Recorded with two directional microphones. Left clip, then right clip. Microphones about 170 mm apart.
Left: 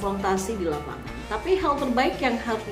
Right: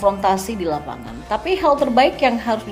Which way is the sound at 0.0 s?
30° right (ahead or behind).